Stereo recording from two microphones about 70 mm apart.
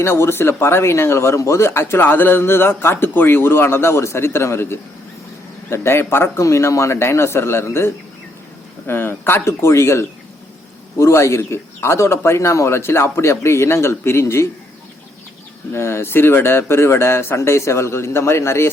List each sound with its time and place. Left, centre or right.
0.0 s speech: left
15.7 s speech: left